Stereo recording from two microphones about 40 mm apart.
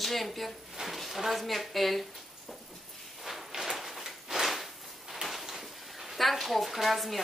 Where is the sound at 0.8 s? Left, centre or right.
Centre.